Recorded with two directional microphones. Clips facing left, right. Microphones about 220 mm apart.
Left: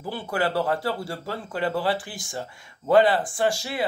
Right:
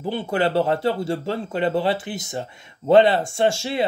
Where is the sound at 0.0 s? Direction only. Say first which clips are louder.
Right 5 dB; 25° right (ahead or behind).